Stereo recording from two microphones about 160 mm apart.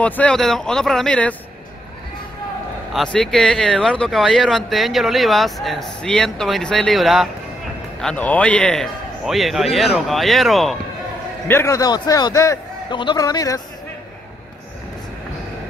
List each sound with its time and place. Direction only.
0.0 s speech: 10° left (ahead or behind)
2.9 s speech: 5° left (ahead or behind)
11.4 s a man's voice: 15° left (ahead or behind)